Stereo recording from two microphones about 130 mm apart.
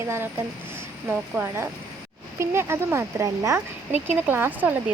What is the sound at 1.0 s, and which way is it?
Speech, 15° right (ahead or behind).